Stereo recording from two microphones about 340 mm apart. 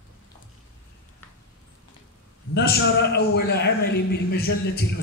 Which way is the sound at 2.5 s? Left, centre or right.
Left.